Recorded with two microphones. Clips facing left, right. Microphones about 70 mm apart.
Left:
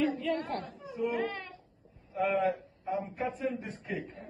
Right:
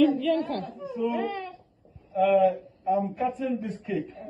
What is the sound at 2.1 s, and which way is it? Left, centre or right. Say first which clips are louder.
Speech: right 8 dB; left.